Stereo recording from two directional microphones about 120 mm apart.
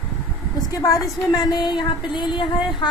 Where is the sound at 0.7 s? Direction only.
30° left (ahead or behind).